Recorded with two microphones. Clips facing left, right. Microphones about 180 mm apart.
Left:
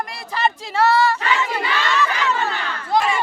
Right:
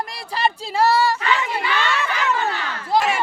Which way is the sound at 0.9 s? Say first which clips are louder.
Left 1 dB; 35° right (ahead or behind).